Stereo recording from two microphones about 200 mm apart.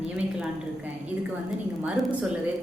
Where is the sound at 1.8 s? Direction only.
5° right (ahead or behind).